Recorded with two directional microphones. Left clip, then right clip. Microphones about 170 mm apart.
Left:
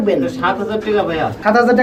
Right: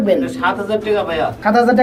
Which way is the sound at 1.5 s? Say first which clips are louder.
Left 1 dB; 25° right (ahead or behind).